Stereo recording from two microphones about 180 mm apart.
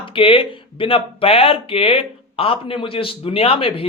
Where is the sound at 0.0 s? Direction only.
30° left (ahead or behind).